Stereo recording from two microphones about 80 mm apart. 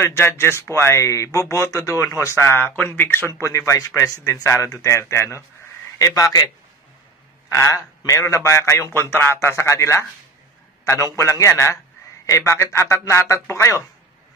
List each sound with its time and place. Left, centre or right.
0.0 s a man's voice: left
7.5 s speech: left